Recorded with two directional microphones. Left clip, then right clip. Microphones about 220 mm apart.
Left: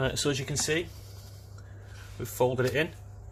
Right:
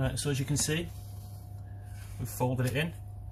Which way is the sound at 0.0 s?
45° left (ahead or behind).